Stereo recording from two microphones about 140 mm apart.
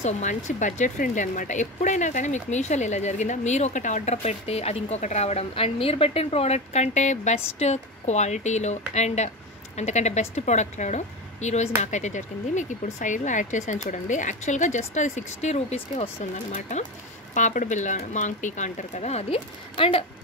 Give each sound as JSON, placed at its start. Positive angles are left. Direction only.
{"t": 0.0, "sound": "speech", "side_deg": 60}
{"t": 17.3, "sound": "speech", "side_deg": 60}